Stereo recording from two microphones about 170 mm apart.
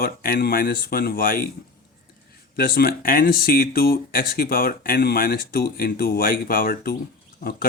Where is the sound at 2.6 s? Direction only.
60° left (ahead or behind).